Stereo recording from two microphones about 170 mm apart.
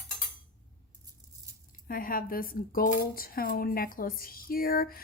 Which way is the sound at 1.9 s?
55° left (ahead or behind).